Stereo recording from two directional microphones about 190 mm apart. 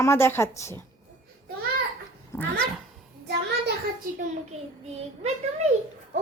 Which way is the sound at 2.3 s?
15° left (ahead or behind).